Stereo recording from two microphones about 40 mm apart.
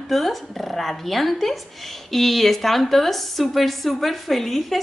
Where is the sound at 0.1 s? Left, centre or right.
Centre.